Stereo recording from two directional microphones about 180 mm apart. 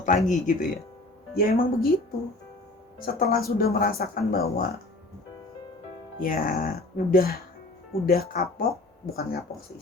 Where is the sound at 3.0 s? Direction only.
55° left (ahead or behind).